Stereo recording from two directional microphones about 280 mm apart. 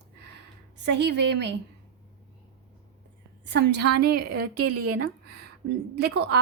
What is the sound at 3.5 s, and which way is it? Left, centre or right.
Speech, right.